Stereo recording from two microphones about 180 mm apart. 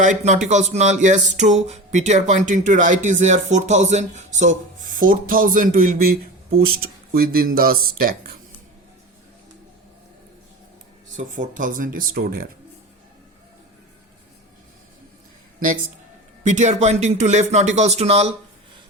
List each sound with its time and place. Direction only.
0.0 s speech: 40° right (ahead or behind)
7.1 s speech: 55° right (ahead or behind)
11.3 s speech: 45° right (ahead or behind)
16.4 s speech: 40° right (ahead or behind)